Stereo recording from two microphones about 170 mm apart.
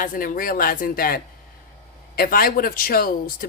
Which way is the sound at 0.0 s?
55° left (ahead or behind).